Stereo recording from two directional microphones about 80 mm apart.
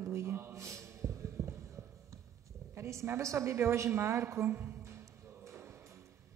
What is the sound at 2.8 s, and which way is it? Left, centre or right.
A man's voice, right.